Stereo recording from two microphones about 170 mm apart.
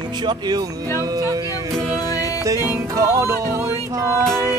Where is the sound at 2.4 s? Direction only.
15° right (ahead or behind).